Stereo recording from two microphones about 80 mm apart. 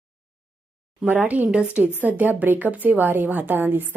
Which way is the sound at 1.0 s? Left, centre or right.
Centre.